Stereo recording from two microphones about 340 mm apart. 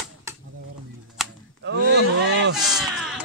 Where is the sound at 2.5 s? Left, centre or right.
Centre.